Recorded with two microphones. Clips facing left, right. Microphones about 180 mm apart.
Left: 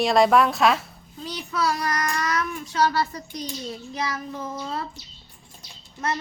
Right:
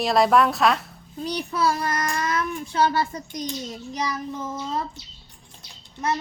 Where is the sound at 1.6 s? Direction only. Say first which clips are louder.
Right 1 dB; 25° right (ahead or behind).